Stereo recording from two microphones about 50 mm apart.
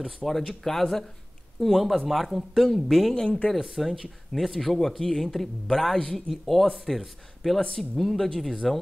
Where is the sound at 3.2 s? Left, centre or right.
Left.